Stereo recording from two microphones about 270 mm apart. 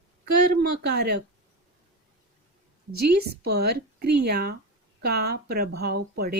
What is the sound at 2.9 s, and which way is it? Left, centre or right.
Speech, right.